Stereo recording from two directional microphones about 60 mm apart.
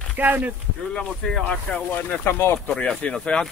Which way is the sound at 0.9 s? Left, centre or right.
Centre.